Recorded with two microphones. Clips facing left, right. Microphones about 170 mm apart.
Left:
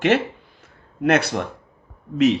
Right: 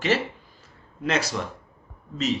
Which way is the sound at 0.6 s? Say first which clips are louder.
Left 9 dB; 60° left (ahead or behind).